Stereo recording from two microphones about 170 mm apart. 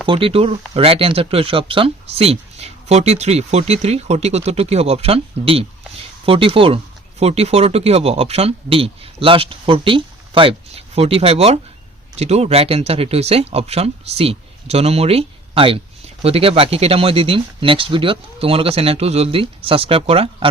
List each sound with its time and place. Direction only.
0.1 s speech: 30° right (ahead or behind)